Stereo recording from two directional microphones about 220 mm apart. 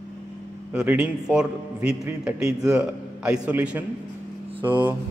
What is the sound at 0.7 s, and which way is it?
A man's voice, 5° right (ahead or behind).